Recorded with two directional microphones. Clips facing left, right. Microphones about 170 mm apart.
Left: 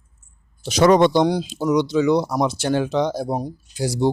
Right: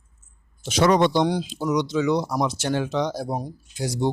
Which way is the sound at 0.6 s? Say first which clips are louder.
Left 4 dB; 40° left (ahead or behind).